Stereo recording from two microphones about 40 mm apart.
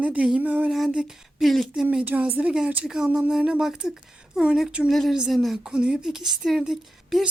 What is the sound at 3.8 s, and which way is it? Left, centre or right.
Speech, right.